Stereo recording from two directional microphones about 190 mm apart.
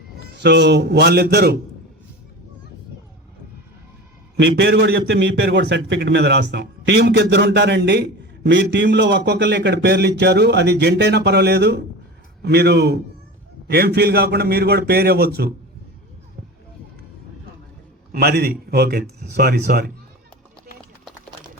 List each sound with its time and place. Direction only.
0.3 s a man's voice: 65° right (ahead or behind)
4.4 s a man's voice: 70° right (ahead or behind)
18.1 s a man's voice: 55° right (ahead or behind)